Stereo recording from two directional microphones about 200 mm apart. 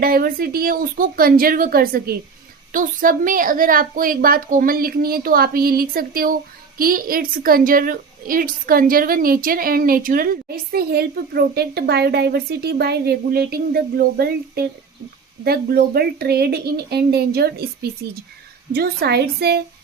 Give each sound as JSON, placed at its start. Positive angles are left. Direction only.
{"t": 0.0, "sound": "a woman's voice", "side_deg": -50}
{"t": 18.7, "sound": "a woman's voice", "side_deg": -50}